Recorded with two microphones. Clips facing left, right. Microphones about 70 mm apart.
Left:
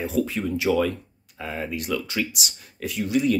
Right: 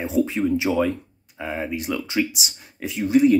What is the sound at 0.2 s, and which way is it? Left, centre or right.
Speech, right.